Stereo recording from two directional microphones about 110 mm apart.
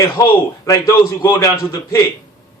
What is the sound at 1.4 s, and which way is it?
Speech, 30° left (ahead or behind).